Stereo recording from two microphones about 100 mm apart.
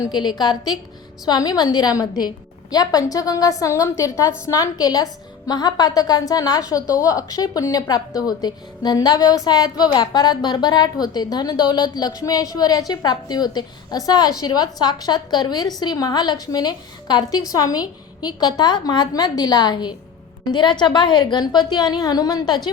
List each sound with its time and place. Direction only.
0.1 s a woman's voice: 45° left (ahead or behind)